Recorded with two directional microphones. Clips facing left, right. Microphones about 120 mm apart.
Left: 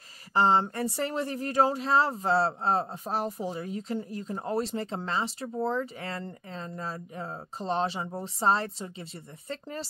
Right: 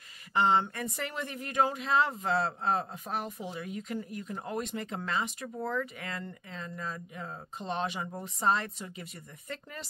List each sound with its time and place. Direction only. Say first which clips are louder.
0.3 s speech: left 3 dB; 35° left (ahead or behind)